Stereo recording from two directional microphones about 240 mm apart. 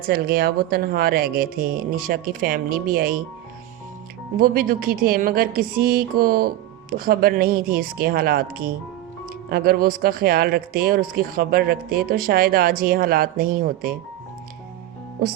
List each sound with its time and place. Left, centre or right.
0.0 s speech: right
4.4 s speech: right